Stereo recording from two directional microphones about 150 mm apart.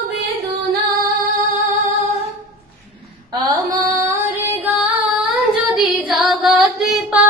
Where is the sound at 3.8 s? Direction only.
20° right (ahead or behind); by 5.4 s 5° right (ahead or behind).